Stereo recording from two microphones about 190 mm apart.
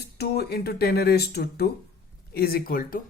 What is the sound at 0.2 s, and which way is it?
Speech, 60° left (ahead or behind).